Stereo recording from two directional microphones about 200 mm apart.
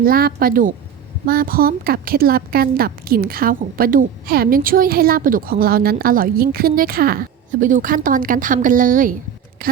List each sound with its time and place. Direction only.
0.0 s a woman's voice: 50° right (ahead or behind)